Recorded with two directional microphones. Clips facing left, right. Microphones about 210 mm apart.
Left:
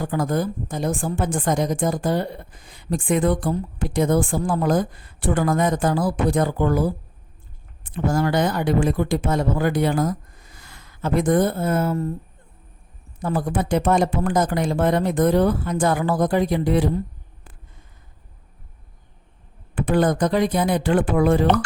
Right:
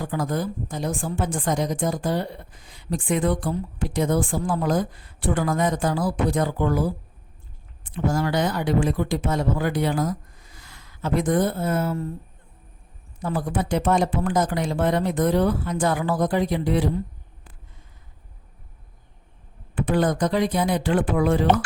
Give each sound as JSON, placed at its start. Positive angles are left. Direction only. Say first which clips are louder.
{"t": 0.0, "sound": "a woman's voice", "louder": "left 3 dB", "side_deg": 50}
{"t": 7.9, "sound": "speech", "louder": "left 2 dB", "side_deg": 50}
{"t": 13.2, "sound": "a woman's voice", "louder": "left 2 dB", "side_deg": 50}
{"t": 19.7, "sound": "a woman's voice", "louder": "left 2 dB", "side_deg": 50}